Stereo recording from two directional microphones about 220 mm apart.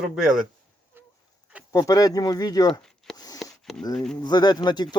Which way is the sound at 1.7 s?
15° left (ahead or behind).